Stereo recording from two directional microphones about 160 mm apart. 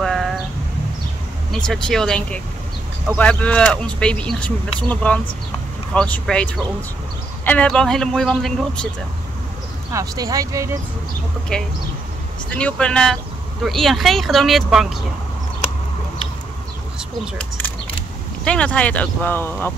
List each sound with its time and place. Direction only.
0.0 s a sound: centre (ahead or behind)
1.7 s speech: 5° left (ahead or behind)
9.9 s speech: 20° right (ahead or behind)
11.5 s speech: 5° left (ahead or behind)
17.4 s speech: 10° left (ahead or behind)